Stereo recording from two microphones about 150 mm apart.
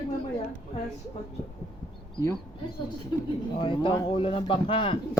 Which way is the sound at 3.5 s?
35° left (ahead or behind).